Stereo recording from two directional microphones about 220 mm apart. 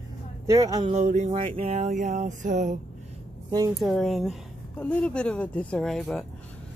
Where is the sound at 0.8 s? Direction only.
30° right (ahead or behind).